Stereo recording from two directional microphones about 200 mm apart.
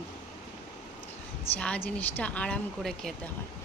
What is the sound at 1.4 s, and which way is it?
A woman's voice, 5° left (ahead or behind).